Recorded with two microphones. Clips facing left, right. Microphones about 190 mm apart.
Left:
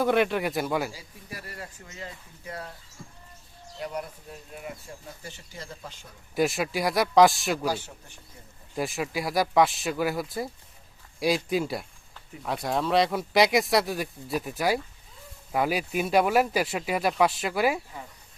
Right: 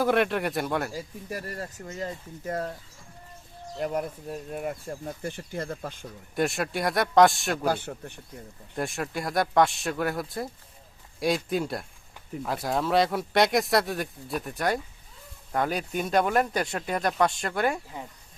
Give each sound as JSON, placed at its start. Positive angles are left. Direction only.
{"t": 0.0, "sound": "speech", "side_deg": 0}
{"t": 0.9, "sound": "speech", "side_deg": -45}
{"t": 3.8, "sound": "speech", "side_deg": -50}
{"t": 6.3, "sound": "speech", "side_deg": 0}
{"t": 7.6, "sound": "speech", "side_deg": -55}
{"t": 8.7, "sound": "speech", "side_deg": 0}